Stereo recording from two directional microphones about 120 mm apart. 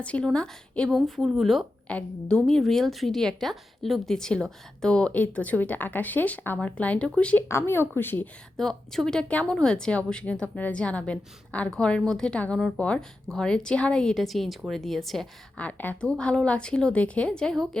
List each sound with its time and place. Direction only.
0.0 s a woman's voice: 10° left (ahead or behind)
7.4 s speech: 20° left (ahead or behind)
8.5 s a woman's voice: 5° left (ahead or behind)